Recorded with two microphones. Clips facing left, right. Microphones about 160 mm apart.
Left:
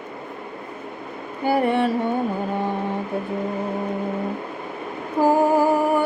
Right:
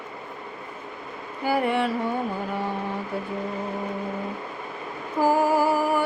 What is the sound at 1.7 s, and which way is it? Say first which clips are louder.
Speech: left 4 dB; 25° left (ahead or behind).